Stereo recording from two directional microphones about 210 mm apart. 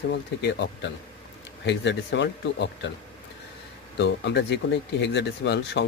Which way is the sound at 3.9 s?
55° left (ahead or behind).